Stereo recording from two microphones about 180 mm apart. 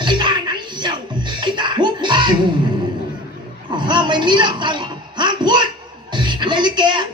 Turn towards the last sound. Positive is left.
turn(degrees=-25)  # may be behind; listen again after turning